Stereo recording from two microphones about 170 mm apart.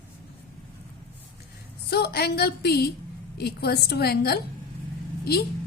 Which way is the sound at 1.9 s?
70° left (ahead or behind).